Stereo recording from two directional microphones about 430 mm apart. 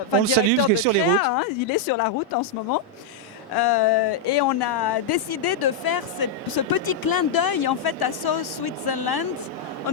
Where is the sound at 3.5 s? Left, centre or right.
Left.